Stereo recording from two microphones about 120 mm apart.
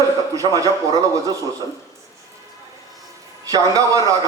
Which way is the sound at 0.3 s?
30° right (ahead or behind).